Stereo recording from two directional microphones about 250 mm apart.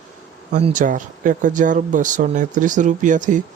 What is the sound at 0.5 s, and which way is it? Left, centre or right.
Speech, right.